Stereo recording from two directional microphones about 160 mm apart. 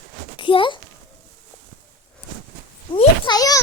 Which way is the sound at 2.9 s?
30° left (ahead or behind).